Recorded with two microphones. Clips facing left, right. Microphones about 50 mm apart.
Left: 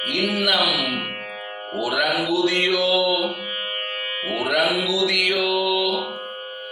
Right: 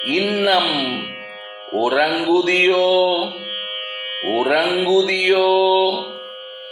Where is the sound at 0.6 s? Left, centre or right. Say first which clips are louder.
Right 1 dB; right.